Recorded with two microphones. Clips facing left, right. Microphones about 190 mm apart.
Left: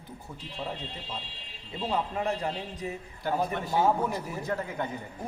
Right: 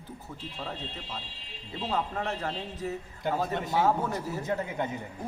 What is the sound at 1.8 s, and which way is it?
A man's voice, 15° left (ahead or behind).